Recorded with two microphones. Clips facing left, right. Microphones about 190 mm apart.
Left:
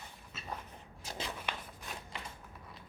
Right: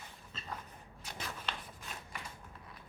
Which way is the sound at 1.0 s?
30° left (ahead or behind).